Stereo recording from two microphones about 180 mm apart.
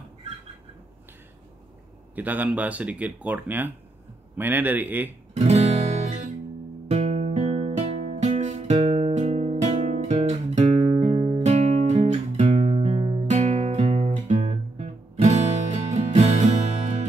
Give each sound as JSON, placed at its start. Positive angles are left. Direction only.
{"t": 2.1, "sound": "speech", "side_deg": -10}
{"t": 5.3, "sound": "music", "side_deg": -40}